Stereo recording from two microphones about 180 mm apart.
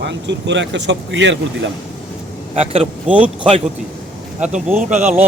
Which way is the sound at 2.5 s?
35° right (ahead or behind).